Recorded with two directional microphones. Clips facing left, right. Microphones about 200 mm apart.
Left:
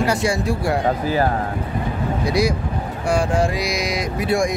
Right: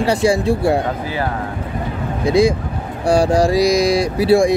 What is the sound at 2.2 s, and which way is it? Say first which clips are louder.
Speech: right 7 dB; 25° right (ahead or behind).